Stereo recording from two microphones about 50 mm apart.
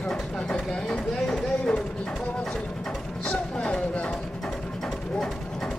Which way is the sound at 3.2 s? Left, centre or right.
Left.